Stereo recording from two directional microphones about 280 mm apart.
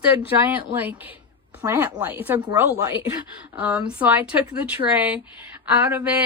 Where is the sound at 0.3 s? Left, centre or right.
Centre.